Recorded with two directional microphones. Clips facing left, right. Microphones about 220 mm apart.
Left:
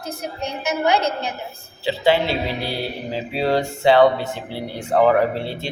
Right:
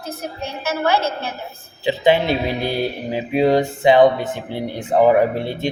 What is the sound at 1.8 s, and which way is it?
Speech, 20° right (ahead or behind).